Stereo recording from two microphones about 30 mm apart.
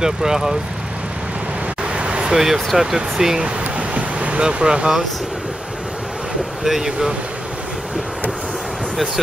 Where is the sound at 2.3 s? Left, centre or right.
Centre.